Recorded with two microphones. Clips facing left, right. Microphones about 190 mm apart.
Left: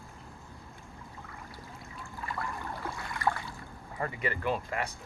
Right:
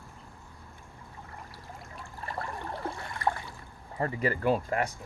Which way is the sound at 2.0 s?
35° right (ahead or behind).